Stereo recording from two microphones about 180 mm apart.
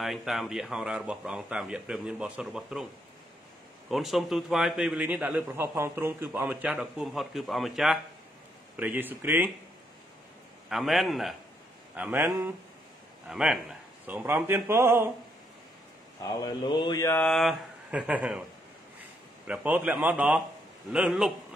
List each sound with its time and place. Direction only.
0.0 s a man's voice: centre (ahead or behind)
3.9 s a man's voice: centre (ahead or behind)
10.7 s a man's voice: centre (ahead or behind)
16.2 s mantra: 25° left (ahead or behind)
17.1 s a man's voice: 5° left (ahead or behind)
19.4 s a man's voice: 5° right (ahead or behind)